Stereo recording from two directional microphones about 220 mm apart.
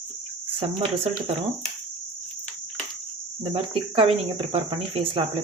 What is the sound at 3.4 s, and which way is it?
Cricket, 25° right (ahead or behind).